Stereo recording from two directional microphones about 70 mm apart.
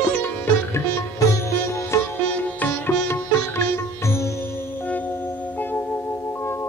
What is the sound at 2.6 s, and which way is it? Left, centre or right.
Sitar, left.